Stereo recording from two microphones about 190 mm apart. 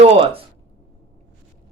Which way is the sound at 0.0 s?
30° right (ahead or behind).